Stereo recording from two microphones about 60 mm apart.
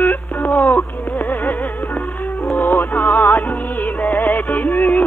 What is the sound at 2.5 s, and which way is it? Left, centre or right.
Music, left.